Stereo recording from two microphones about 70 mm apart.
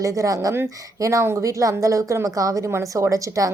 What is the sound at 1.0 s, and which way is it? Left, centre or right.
A woman's voice, right.